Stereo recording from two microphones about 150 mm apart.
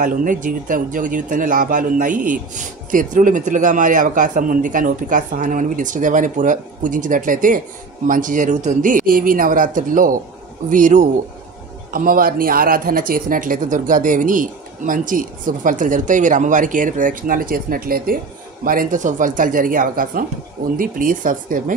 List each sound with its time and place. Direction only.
0.0 s speech: 60° right (ahead or behind)
11.9 s speech: 70° right (ahead or behind)